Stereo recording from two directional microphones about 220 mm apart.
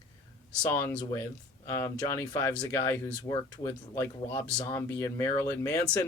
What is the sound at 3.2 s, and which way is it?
Speech, 25° left (ahead or behind).